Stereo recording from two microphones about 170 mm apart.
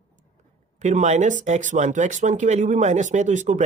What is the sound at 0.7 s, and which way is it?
Speech, 45° right (ahead or behind).